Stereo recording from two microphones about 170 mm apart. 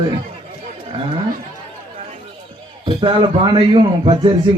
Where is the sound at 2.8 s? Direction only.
30° right (ahead or behind).